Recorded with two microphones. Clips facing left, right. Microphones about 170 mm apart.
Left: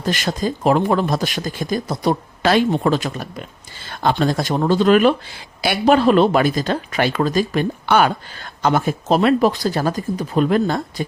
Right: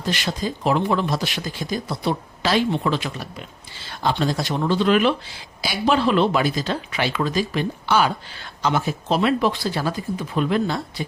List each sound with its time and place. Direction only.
0.0 s speech: 45° left (ahead or behind)
5.6 s speech: 55° left (ahead or behind)